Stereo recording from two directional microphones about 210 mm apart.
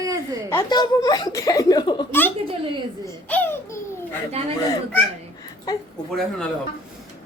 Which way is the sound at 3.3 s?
10° left (ahead or behind).